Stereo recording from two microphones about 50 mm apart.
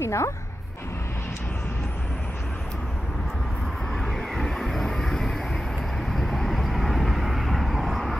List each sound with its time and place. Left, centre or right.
0.0 s bow-wow: left
3.9 s vehicle: centre